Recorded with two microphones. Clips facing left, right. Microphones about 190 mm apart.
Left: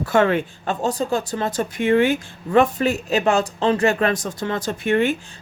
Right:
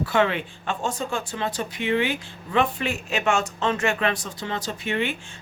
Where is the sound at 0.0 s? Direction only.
45° left (ahead or behind).